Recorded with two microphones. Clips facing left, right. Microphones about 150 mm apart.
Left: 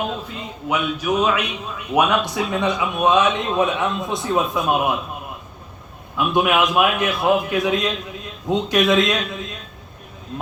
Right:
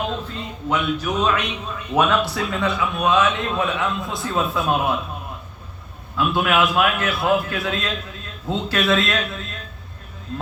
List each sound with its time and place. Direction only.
0.1 s speech: 10° left (ahead or behind)
6.1 s speech: 20° left (ahead or behind)